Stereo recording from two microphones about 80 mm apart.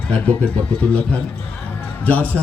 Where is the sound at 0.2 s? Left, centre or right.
Centre.